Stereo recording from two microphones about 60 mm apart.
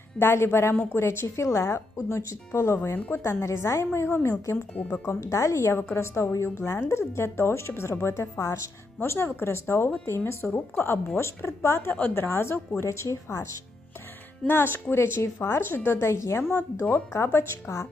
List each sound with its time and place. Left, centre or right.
0.2 s speech: left
4.7 s speech: left
5.0 s speech: left
10.4 s speech: left
10.8 s speech: left
11.9 s speech: left
14.4 s speech: left